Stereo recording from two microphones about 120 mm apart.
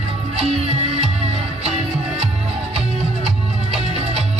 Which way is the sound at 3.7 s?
60° right (ahead or behind).